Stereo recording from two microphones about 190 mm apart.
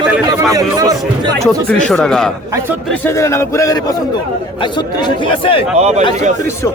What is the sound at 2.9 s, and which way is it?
A man's voice, 15° left (ahead or behind).